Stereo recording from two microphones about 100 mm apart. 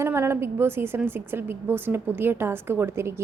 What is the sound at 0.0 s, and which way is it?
A woman's voice, 25° right (ahead or behind).